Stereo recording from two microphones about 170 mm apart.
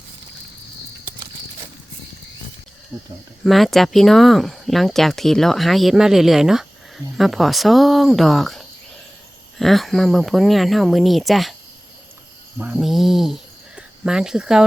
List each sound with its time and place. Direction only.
2.9 s speech: 20° right (ahead or behind)
3.4 s speech: centre (ahead or behind)
12.5 s a sound: 10° right (ahead or behind)